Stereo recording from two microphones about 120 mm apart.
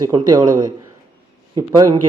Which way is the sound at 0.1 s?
35° right (ahead or behind).